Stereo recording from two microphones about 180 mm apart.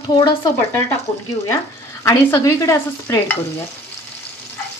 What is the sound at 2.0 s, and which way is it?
Speech, 15° left (ahead or behind).